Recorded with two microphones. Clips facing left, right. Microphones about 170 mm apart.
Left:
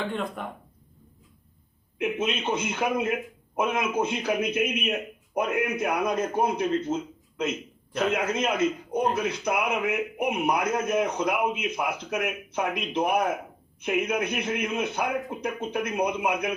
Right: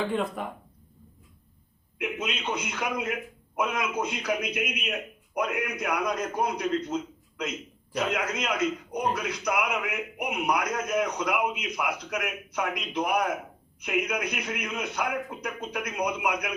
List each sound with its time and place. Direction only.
0.1 s speech: centre (ahead or behind)
2.0 s a man's voice: 25° left (ahead or behind)